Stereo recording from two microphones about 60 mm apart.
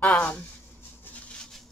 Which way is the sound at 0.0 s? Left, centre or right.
Left.